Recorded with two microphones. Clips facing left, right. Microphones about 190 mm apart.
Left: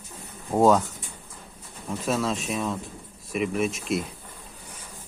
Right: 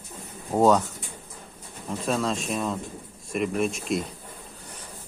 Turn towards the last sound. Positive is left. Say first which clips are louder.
# even
turn(degrees=0)  # may be behind; listen again after turning